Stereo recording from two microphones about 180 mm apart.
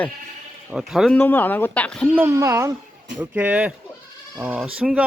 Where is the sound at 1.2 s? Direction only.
10° left (ahead or behind).